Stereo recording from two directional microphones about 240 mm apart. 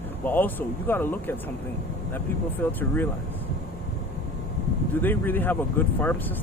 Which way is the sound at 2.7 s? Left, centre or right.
Centre.